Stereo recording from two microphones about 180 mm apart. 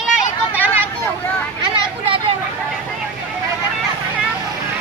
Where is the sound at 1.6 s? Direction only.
25° right (ahead or behind).